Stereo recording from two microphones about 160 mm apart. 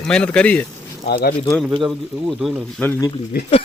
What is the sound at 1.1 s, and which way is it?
Speech, 70° left (ahead or behind).